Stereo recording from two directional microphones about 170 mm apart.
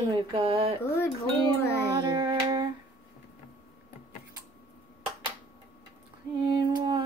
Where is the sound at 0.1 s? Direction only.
30° right (ahead or behind).